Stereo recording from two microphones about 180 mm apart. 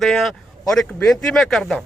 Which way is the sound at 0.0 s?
Centre (ahead or behind).